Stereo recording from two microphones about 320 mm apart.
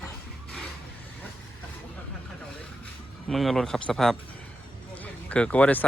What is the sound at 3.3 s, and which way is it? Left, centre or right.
Speech, centre.